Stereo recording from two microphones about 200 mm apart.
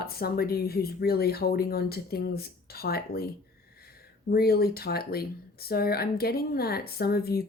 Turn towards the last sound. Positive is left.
turn(degrees=50)  # may be behind; listen again after turning